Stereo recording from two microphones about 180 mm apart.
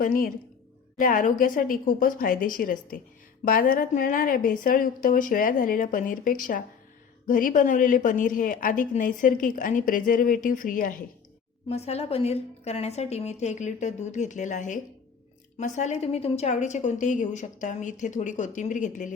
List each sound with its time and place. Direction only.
0.0 s a woman's voice: 50° left (ahead or behind)
11.7 s a woman's voice: 35° left (ahead or behind)